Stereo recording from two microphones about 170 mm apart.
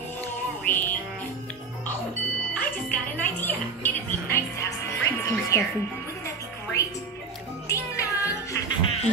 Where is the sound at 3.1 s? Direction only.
10° left (ahead or behind).